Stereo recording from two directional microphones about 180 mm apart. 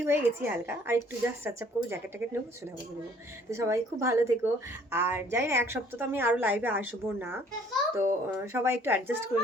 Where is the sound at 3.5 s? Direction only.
15° right (ahead or behind).